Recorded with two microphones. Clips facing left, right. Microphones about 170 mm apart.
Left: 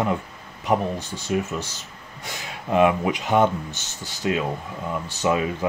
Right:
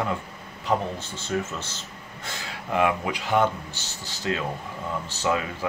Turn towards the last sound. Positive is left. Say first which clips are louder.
# left 4 dB
turn(degrees=20)  # may be behind; listen again after turning